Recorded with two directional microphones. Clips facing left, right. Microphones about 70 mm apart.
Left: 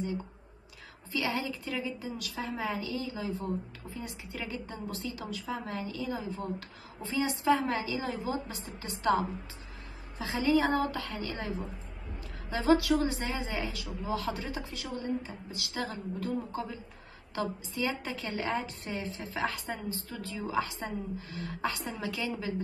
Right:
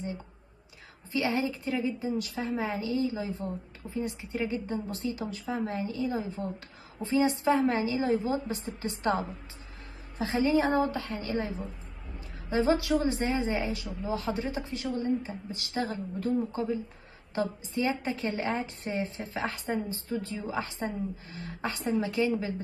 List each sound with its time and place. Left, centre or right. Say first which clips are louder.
1.1 s a woman's voice: right 4 dB; right
10.1 s a woman's voice: right 2 dB; right